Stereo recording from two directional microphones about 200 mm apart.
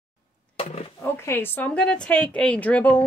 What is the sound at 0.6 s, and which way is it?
Roaring cats, 30° left (ahead or behind).